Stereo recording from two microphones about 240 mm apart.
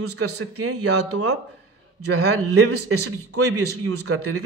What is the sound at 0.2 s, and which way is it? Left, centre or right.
Speech, right.